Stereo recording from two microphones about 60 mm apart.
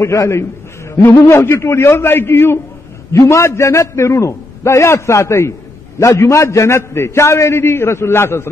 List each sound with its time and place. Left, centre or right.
1.0 s a man's voice: left
3.1 s a man's voice: left
5.9 s a man's voice: left